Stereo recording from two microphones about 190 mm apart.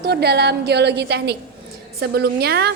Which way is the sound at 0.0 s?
60° right (ahead or behind).